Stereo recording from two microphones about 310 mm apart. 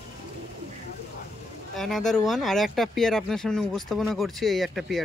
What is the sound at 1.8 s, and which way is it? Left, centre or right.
Speech, centre.